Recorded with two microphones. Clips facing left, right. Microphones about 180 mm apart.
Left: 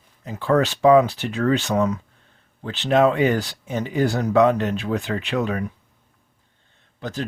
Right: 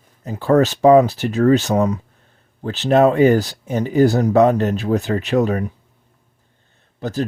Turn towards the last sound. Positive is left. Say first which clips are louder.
# right 6 dB
turn(degrees=-40)  # may be behind; listen again after turning